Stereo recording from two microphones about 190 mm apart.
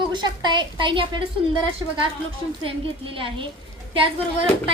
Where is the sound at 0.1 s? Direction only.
25° right (ahead or behind).